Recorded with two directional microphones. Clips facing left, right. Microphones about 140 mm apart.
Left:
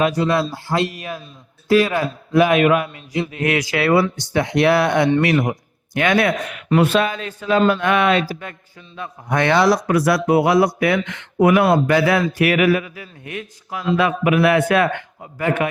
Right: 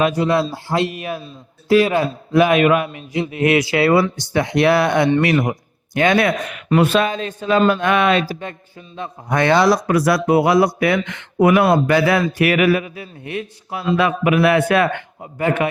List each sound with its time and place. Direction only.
0.0 s a man's voice: 20° right (ahead or behind)